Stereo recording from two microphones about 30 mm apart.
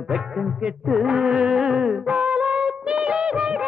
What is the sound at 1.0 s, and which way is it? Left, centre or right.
Music, right.